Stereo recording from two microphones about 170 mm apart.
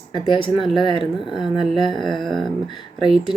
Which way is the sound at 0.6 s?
Centre (ahead or behind).